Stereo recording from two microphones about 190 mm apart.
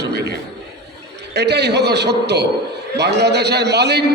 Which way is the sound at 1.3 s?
60° right (ahead or behind).